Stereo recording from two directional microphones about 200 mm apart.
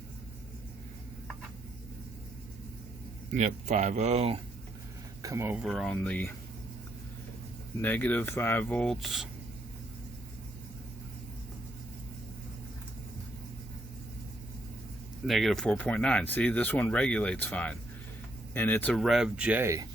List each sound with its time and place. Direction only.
3.3 s speech: 35° right (ahead or behind)
5.2 s speech: 15° right (ahead or behind)
5.6 s speech: centre (ahead or behind)
7.8 s speech: 10° left (ahead or behind)
15.3 s speech: centre (ahead or behind); by 19.9 s 15° right (ahead or behind)